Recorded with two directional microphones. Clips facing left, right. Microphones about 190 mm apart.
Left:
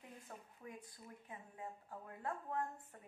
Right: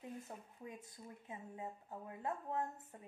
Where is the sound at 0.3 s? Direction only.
20° right (ahead or behind).